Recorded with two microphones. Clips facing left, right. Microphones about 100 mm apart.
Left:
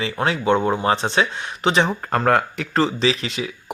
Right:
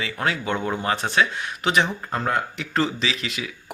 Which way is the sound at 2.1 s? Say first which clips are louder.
Left 6 dB; 65° left (ahead or behind).